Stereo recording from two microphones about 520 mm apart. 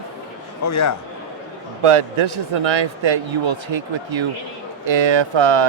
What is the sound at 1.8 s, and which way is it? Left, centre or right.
A man's voice, right.